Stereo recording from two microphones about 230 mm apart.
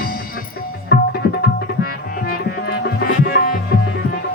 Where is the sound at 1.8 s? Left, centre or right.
Left.